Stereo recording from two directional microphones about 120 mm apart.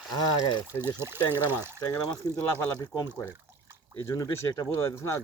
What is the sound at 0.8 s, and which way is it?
Speech, 20° right (ahead or behind).